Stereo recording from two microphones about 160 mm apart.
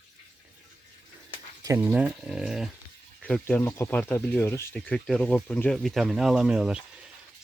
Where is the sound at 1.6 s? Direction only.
20° right (ahead or behind).